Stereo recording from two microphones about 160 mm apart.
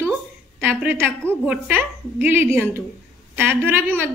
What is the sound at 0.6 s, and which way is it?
A woman's voice, 10° right (ahead or behind).